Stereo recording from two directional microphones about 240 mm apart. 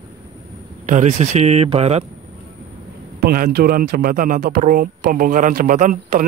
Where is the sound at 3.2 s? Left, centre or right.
Right.